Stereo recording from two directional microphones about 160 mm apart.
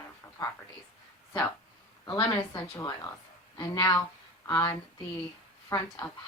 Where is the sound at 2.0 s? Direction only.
25° left (ahead or behind).